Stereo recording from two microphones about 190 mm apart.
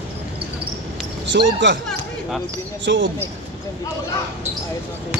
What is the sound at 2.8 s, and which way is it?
Speech, 75° right (ahead or behind).